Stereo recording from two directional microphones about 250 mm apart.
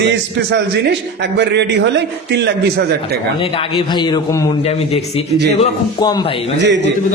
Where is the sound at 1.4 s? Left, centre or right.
Right.